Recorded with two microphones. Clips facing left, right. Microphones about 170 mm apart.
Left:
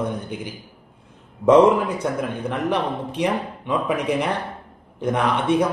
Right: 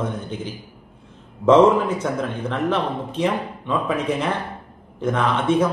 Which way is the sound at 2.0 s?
15° left (ahead or behind).